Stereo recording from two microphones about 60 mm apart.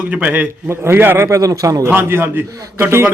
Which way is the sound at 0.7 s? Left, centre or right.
Right.